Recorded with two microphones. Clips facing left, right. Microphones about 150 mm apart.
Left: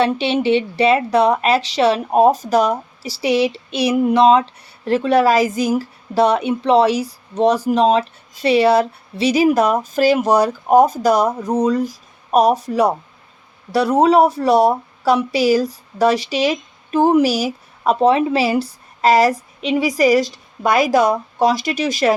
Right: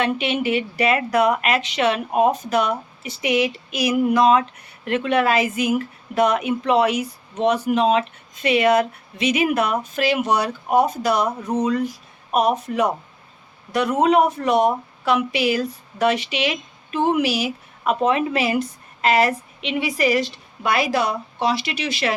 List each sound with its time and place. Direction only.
0.0 s a woman's voice: 30° left (ahead or behind)